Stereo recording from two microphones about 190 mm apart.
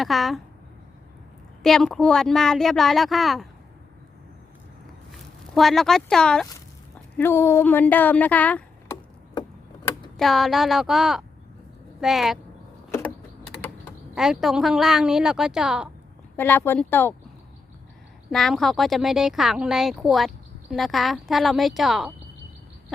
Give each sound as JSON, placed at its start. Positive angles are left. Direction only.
{"t": 0.0, "sound": "speech", "side_deg": 0}
{"t": 1.6, "sound": "speech", "side_deg": 0}
{"t": 5.5, "sound": "speech", "side_deg": 0}
{"t": 10.2, "sound": "speech", "side_deg": 0}
{"t": 12.9, "sound": "a sound", "side_deg": 10}
{"t": 14.2, "sound": "speech", "side_deg": 0}
{"t": 16.4, "sound": "speech", "side_deg": 10}
{"t": 18.3, "sound": "speech", "side_deg": 0}